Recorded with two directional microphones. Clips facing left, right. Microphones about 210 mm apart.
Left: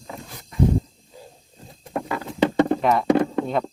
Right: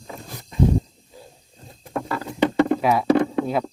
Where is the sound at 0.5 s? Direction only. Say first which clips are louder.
Right 1 dB; 20° right (ahead or behind).